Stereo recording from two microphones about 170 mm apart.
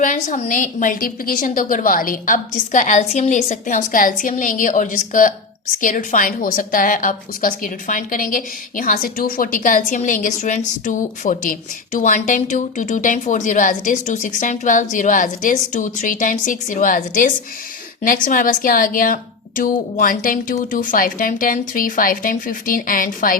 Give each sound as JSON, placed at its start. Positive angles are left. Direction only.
{"t": 0.0, "sound": "a woman's voice", "side_deg": 50}